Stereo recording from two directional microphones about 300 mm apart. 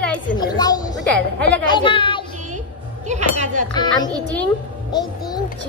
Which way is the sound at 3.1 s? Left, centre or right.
Right.